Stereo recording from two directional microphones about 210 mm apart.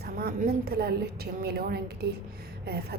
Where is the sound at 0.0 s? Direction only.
45° right (ahead or behind).